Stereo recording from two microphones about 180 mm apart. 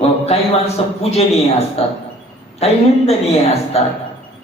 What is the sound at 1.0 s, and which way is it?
A woman's voice, 35° left (ahead or behind).